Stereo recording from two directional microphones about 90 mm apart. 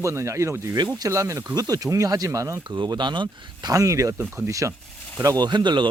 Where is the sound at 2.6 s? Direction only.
55° right (ahead or behind).